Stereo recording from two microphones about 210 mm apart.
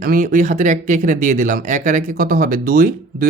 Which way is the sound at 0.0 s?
40° right (ahead or behind).